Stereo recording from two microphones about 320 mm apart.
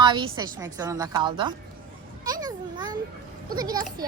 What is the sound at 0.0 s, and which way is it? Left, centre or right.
A woman's voice, centre.